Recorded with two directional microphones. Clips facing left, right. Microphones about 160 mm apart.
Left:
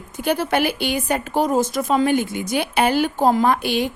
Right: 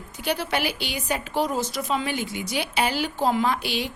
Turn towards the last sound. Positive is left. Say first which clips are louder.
# left 6 dB
turn(degrees=50)  # may be behind; listen again after turning